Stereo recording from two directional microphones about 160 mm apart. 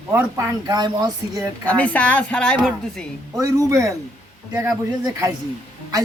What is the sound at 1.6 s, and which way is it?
Speech, 10° left (ahead or behind).